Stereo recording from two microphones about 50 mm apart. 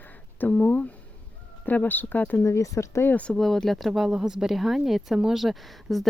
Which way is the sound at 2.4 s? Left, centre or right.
Left.